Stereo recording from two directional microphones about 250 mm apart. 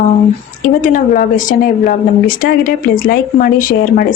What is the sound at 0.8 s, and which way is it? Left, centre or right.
A woman's voice, left.